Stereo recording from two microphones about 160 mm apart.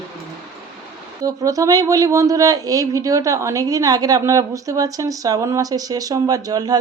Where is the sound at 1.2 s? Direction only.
20° right (ahead or behind).